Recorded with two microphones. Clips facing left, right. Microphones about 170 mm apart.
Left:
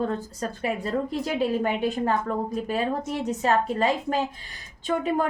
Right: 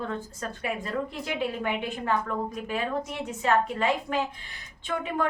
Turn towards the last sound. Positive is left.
turn(degrees=40)  # may be behind; listen again after turning